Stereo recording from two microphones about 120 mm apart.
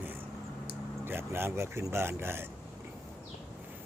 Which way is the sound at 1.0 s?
20° right (ahead or behind).